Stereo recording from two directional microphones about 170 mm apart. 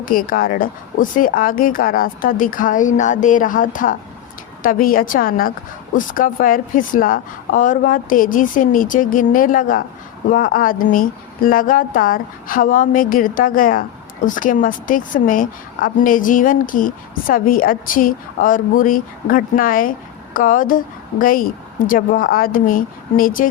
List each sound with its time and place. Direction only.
0.0 s a woman's voice: 55° left (ahead or behind)